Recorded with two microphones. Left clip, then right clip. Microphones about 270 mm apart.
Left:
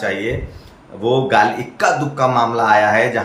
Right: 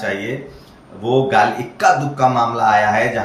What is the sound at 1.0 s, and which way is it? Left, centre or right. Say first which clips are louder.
Speech: even; centre.